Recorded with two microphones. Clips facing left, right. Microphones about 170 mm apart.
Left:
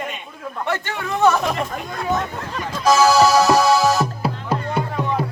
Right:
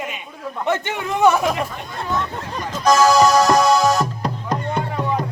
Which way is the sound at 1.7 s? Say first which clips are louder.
Left 2 dB; 45° left (ahead or behind).